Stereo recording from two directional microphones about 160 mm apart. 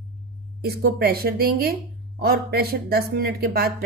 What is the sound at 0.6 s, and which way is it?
Speech, 80° right.